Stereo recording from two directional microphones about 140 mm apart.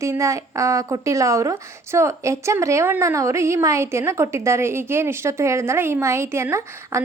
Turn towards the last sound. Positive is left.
turn(degrees=-20)  # may be behind; listen again after turning